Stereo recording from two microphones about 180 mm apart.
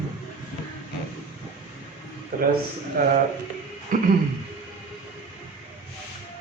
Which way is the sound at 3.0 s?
55° right (ahead or behind).